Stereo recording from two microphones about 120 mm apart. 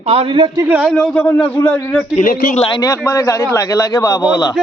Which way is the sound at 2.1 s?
75° left (ahead or behind).